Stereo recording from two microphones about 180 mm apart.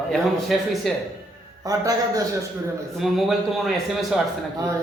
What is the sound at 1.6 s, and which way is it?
Speech, 20° right (ahead or behind).